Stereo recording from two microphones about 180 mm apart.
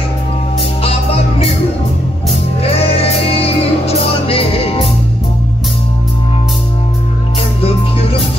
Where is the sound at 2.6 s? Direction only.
35° left (ahead or behind).